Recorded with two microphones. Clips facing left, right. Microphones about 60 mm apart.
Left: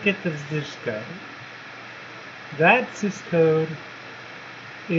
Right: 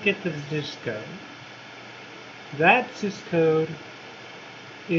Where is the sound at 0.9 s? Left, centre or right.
Left.